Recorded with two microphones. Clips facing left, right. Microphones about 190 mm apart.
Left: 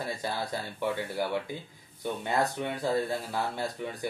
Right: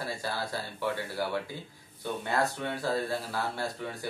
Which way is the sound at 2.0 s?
20° left (ahead or behind).